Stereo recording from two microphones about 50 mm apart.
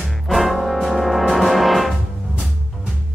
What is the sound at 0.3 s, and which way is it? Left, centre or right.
Music, centre.